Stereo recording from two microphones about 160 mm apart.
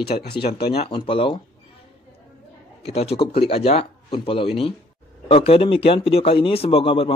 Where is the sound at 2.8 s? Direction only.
40° left (ahead or behind).